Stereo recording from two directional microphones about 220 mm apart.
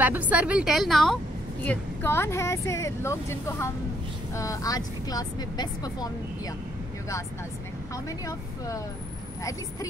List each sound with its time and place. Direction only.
0.0 s a woman's voice: 5° right (ahead or behind); by 6.5 s 15° left (ahead or behind)
7.9 s speech: 15° left (ahead or behind)